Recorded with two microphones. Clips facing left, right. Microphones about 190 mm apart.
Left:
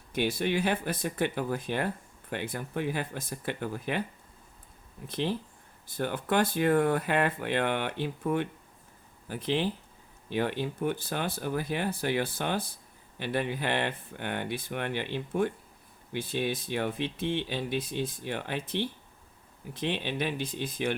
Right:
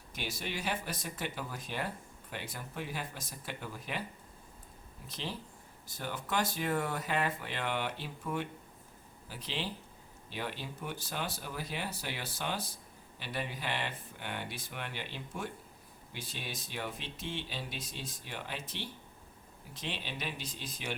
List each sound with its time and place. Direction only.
0.1 s speech: 55° left (ahead or behind)
5.0 s speech: 55° left (ahead or behind)